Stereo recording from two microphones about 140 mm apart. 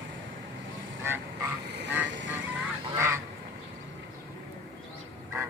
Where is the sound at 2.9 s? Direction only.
20° right (ahead or behind).